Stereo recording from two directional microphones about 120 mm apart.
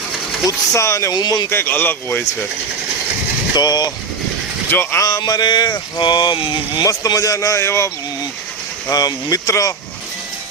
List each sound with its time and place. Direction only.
0.4 s chopping: 25° left (ahead or behind)
1.5 s speech: 20° left (ahead or behind)
3.5 s speech: 35° left (ahead or behind)
4.7 s speech: 15° left (ahead or behind)
5.0 s speech: 30° left (ahead or behind)
6.8 s chopping: 30° left (ahead or behind)
8.9 s chopping: 30° left (ahead or behind)